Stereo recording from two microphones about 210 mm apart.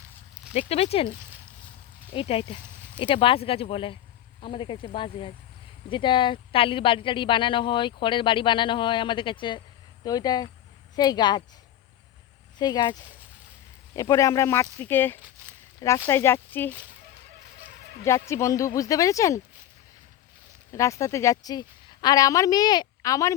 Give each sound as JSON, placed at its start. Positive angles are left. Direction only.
{"t": 0.7, "sound": "speech", "side_deg": 30}
{"t": 2.1, "sound": "speech", "side_deg": 25}
{"t": 12.5, "sound": "speech", "side_deg": 20}
{"t": 18.0, "sound": "speech", "side_deg": 15}
{"t": 20.7, "sound": "speech", "side_deg": 15}